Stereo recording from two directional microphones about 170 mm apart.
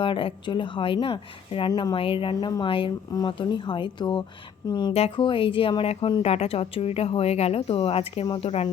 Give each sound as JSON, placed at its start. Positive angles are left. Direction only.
{"t": 0.0, "sound": "a woman's voice", "side_deg": 30}